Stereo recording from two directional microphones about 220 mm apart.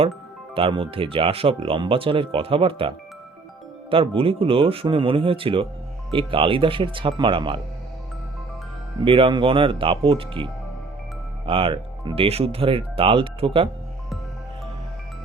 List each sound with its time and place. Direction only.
0.5 s speech: 25° right (ahead or behind)
9.0 s speech: 25° right (ahead or behind)